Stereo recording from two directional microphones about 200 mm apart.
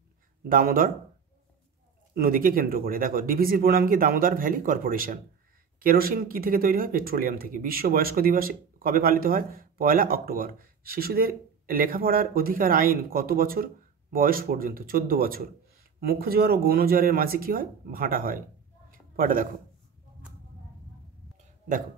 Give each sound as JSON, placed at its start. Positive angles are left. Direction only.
{"t": 0.5, "sound": "speech", "side_deg": -45}
{"t": 2.1, "sound": "speech", "side_deg": -45}
{"t": 18.9, "sound": "a sound", "side_deg": -45}